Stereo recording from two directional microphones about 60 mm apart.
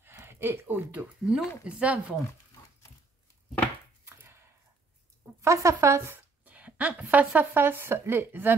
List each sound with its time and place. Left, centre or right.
0.2 s speech: right
1.2 s speech: centre
1.6 s speech: right
4.0 s a sound: right
5.4 s speech: right
6.1 s speech: right